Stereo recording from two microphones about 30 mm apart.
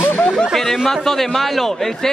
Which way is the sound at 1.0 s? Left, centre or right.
Centre.